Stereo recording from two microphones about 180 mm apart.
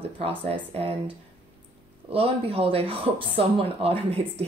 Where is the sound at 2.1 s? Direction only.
35° right (ahead or behind).